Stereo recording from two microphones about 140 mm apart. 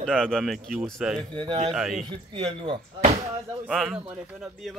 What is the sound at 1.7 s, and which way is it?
Speech, centre (ahead or behind).